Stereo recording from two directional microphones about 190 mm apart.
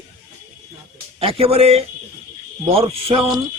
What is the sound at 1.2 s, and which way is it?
A man's voice, 30° right (ahead or behind).